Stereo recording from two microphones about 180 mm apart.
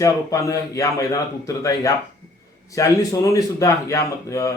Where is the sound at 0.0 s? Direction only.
20° left (ahead or behind).